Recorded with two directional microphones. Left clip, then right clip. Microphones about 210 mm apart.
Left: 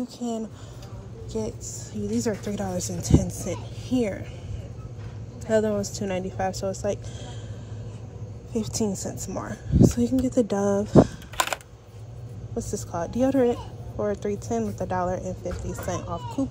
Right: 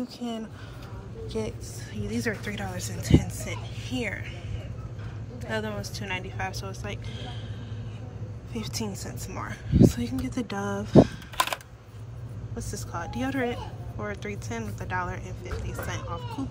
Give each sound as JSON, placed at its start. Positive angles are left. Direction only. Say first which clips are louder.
{"t": 0.0, "sound": "a woman's voice", "louder": "left 3 dB", "side_deg": 20}
{"t": 5.5, "sound": "speech", "louder": "left 9 dB", "side_deg": 30}
{"t": 8.5, "sound": "a woman's voice", "louder": "left 7 dB", "side_deg": 30}
{"t": 11.3, "sound": "typing", "louder": "left 1 dB", "side_deg": 5}
{"t": 12.5, "sound": "a woman's voice", "louder": "left 6 dB", "side_deg": 30}